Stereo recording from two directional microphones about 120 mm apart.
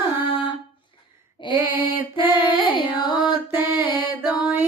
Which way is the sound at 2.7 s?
35° left (ahead or behind).